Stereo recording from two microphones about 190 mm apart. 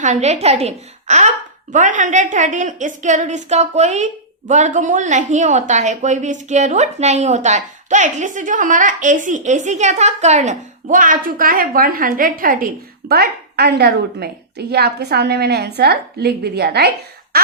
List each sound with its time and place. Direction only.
0.0 s a woman's voice: 35° right (ahead or behind); by 16.9 s 55° right (ahead or behind)